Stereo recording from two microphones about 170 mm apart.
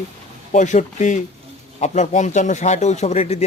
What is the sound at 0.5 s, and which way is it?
Speech, 45° left (ahead or behind).